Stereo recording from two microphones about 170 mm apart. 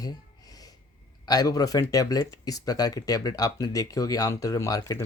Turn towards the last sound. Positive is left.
turn(degrees=20)  # may be behind; listen again after turning